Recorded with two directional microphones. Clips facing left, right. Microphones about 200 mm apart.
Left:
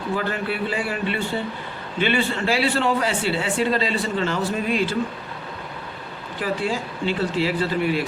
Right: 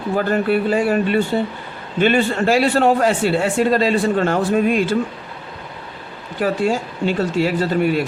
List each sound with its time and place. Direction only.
0.2 s a man's voice: 45° right (ahead or behind)
6.4 s a man's voice: 45° right (ahead or behind)